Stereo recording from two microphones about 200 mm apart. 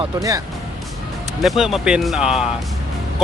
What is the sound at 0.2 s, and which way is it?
Speech, 15° right (ahead or behind).